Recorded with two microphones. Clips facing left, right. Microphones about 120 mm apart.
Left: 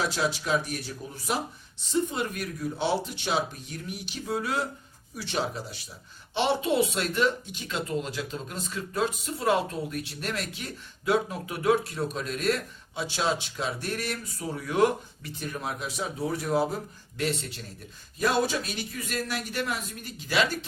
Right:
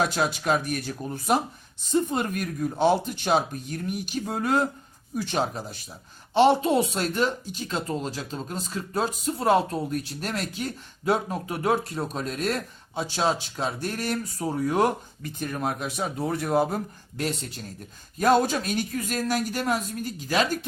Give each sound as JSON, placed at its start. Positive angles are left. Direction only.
{"t": 0.0, "sound": "speech", "side_deg": -55}